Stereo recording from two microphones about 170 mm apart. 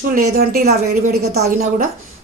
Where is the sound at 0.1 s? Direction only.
55° right (ahead or behind).